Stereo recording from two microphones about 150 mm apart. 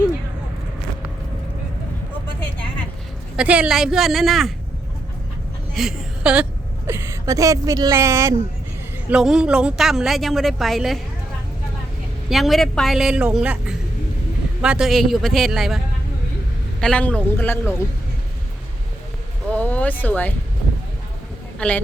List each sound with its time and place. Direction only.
3.3 s a woman's voice: 10° right (ahead or behind)
5.7 s a woman's voice: 5° right (ahead or behind); by 8.4 s 20° right (ahead or behind)
9.0 s a woman's voice: 5° right (ahead or behind)
12.3 s a woman's voice: centre (ahead or behind)
16.8 s a man's voice: 5° left (ahead or behind)
19.5 s a sound: 10° left (ahead or behind)